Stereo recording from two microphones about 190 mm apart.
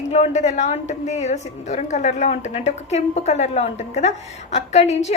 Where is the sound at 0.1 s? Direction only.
35° left (ahead or behind).